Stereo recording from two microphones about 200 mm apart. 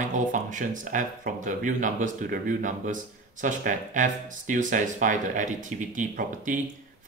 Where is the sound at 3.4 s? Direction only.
40° right (ahead or behind).